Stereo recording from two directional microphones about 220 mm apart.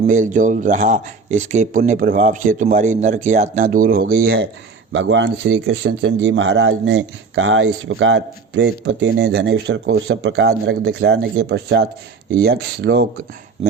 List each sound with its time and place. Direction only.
0.1 s speech: 35° right (ahead or behind)
4.9 s speech: 60° right (ahead or behind)